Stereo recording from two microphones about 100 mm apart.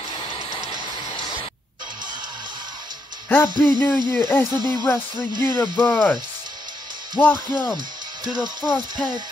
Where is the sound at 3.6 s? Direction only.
20° left (ahead or behind).